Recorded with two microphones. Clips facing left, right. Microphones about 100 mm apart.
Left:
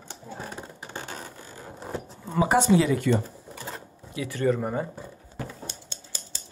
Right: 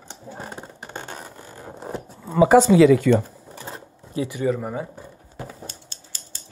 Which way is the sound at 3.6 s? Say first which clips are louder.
Right 2 dB; 30° right (ahead or behind).